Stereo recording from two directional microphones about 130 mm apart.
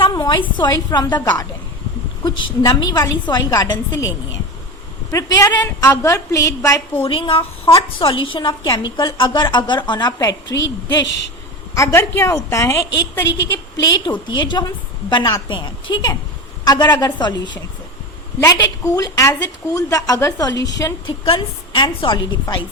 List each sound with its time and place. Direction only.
0.1 s a woman's voice: 35° left (ahead or behind)
5.1 s a woman's voice: 25° left (ahead or behind)
7.0 s a woman's voice: 45° left (ahead or behind); by 12.8 s 20° left (ahead or behind)
13.8 s a woman's voice: 35° left (ahead or behind)
18.3 s a woman's voice: 25° left (ahead or behind)
21.2 s a woman's voice: 40° left (ahead or behind)